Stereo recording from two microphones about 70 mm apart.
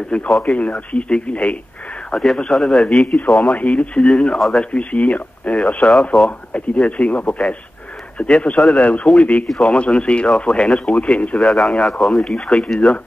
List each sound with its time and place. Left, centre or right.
0.4 s speech: centre
4.7 s speech: centre
6.1 s speech: centre
6.5 s speech: centre
8.5 s speech: centre
9.8 s speech: centre
11.3 s speech: centre